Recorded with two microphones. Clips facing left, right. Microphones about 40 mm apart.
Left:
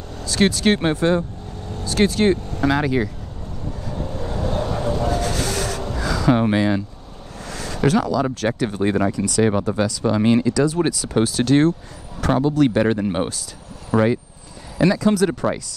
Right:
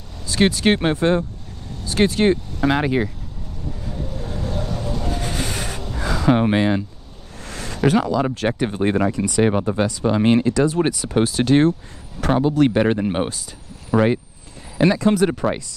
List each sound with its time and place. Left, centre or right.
0.2 s speech: centre
3.9 s vehicle: left
5.1 s a sound: centre
5.9 s gasp: centre
7.4 s a sound: right
7.8 s speech: centre
9.1 s speech: right
9.5 s speech: centre
10.2 s speech: right
10.7 s speech: centre